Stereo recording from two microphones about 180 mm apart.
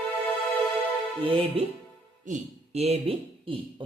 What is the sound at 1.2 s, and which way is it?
Speech, 30° right (ahead or behind).